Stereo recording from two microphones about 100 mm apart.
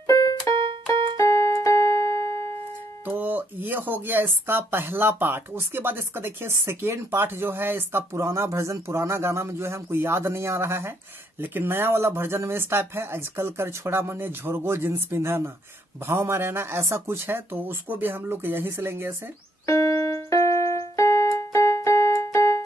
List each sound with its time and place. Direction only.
0.0 s keyboard: 35° left (ahead or behind)
3.2 s speech: 15° right (ahead or behind)
19.6 s music: 30° left (ahead or behind)
20.9 s keyboard: 30° left (ahead or behind)